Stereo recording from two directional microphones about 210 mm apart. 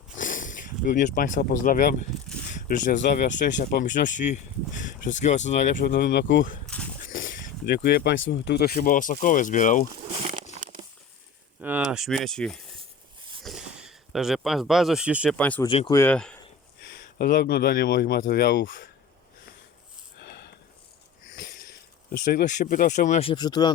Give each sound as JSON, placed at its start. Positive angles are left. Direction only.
{"t": 0.2, "sound": "speech", "side_deg": 40}
{"t": 6.7, "sound": "a sound", "side_deg": 5}
{"t": 7.2, "sound": "speech", "side_deg": 45}
{"t": 10.2, "sound": "crumpling", "side_deg": -30}
{"t": 11.6, "sound": "speech", "side_deg": -5}
{"t": 15.4, "sound": "speech", "side_deg": 5}
{"t": 15.6, "sound": "speech", "side_deg": 25}
{"t": 16.0, "sound": "speech", "side_deg": 5}
{"t": 16.8, "sound": "speech", "side_deg": 45}
{"t": 20.1, "sound": "sniff", "side_deg": 50}
{"t": 22.1, "sound": "speech", "side_deg": 45}